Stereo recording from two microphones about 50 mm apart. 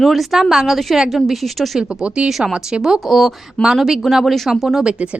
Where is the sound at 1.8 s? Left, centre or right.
Centre.